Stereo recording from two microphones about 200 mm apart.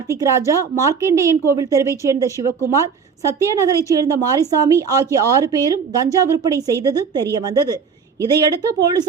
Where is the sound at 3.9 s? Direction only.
15° right (ahead or behind).